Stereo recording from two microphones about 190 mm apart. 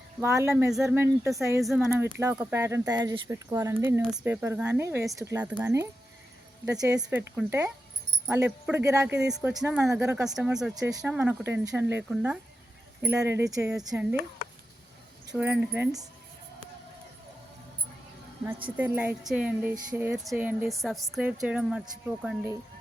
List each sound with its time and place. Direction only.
0.2 s speech: 15° right (ahead or behind)
9.6 s a woman's voice: 5° right (ahead or behind)
13.7 s a woman's voice: 5° right (ahead or behind)
14.4 s a sound: 50° left (ahead or behind)
15.4 s a woman's voice: 5° right (ahead or behind)
18.8 s a woman's voice: 10° right (ahead or behind)